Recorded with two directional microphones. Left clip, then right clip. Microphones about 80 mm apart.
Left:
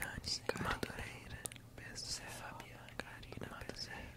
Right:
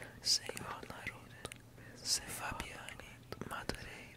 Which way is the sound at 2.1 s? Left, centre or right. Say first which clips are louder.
Right 11 dB; right.